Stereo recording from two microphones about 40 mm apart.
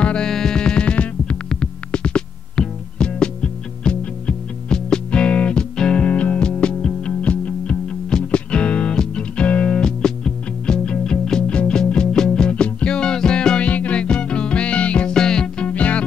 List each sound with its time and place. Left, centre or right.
0.0 s music: left
6.0 s music: left
9.8 s music: centre
11.4 s music: left
13.7 s music: left
14.0 s music: left
15.0 s music: centre
15.6 s music: left